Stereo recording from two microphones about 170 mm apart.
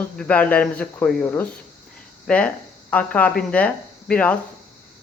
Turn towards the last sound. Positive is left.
turn(degrees=10)  # may be behind; listen again after turning